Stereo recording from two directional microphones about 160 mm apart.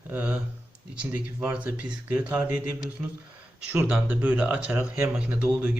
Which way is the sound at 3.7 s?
10° right (ahead or behind).